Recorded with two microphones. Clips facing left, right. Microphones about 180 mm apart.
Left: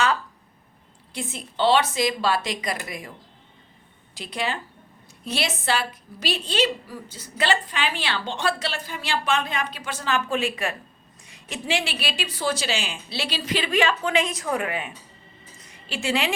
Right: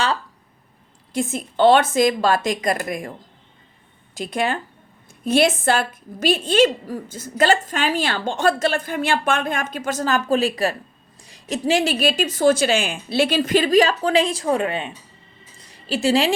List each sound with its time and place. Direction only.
1.1 s a woman's voice: 45° right (ahead or behind)
4.1 s a woman's voice: 50° right (ahead or behind)